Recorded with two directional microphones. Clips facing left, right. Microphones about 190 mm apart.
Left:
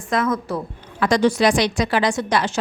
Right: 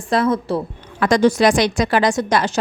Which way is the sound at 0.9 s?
50° right (ahead or behind).